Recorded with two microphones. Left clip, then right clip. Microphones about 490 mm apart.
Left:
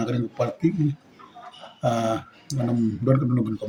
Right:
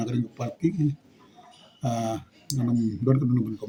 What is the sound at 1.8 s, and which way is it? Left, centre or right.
Speech, right.